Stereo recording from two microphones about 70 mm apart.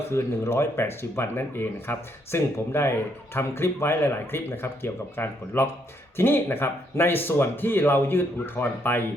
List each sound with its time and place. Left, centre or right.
0.1 s speech: left